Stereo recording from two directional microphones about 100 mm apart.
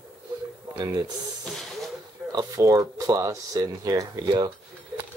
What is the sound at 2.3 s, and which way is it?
Speech, 40° right (ahead or behind).